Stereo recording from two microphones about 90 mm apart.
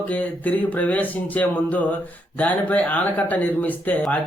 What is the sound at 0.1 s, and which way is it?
Speech, 15° left (ahead or behind).